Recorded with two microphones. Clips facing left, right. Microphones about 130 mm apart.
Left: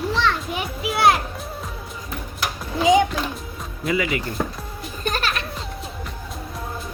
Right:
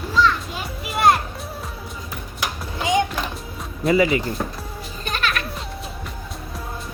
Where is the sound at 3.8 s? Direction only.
35° right (ahead or behind).